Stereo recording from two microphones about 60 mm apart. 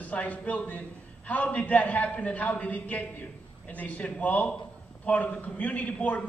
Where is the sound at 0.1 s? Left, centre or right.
Left.